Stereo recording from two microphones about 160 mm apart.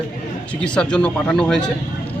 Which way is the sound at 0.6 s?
5° left (ahead or behind).